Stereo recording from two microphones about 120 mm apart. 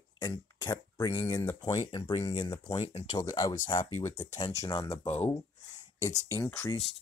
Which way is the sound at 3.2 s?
30° left (ahead or behind).